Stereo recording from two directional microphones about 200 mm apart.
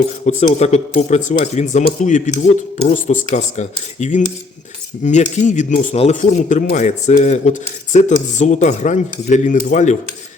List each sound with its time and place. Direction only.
0.3 s speech: 35° left (ahead or behind)